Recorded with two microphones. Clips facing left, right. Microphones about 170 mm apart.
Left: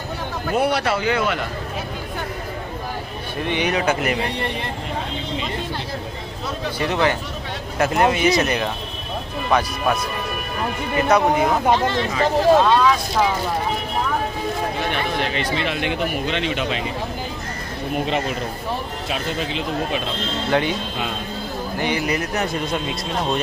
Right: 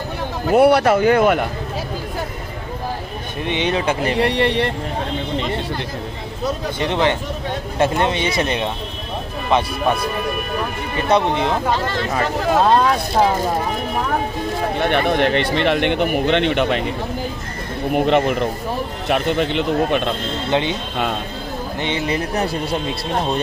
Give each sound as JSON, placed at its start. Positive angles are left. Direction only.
{"t": 0.6, "sound": "speech", "side_deg": -60}
{"t": 3.4, "sound": "speech", "side_deg": -25}
{"t": 4.2, "sound": "speech", "side_deg": -85}
{"t": 6.8, "sound": "speech", "side_deg": -25}
{"t": 11.1, "sound": "speech", "side_deg": -25}
{"t": 12.6, "sound": "speech", "side_deg": -45}
{"t": 14.8, "sound": "speech", "side_deg": -60}
{"t": 17.9, "sound": "speech", "side_deg": -60}
{"t": 20.4, "sound": "speech", "side_deg": -20}
{"t": 21.7, "sound": "speech", "side_deg": -25}